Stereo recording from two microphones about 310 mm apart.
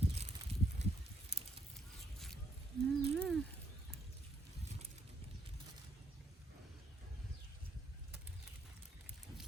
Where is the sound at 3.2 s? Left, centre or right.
Centre.